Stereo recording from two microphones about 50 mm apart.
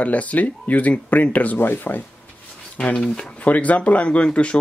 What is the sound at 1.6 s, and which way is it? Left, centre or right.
Speech, left.